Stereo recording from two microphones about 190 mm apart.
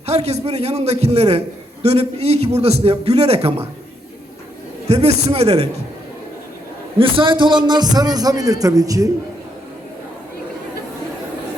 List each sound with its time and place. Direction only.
0.0 s a man's voice: 35° right (ahead or behind)
4.9 s a man's voice: 35° right (ahead or behind)
7.0 s a man's voice: 25° right (ahead or behind)